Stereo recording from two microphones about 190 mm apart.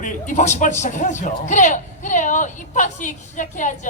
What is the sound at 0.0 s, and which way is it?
Speech, 40° left (ahead or behind).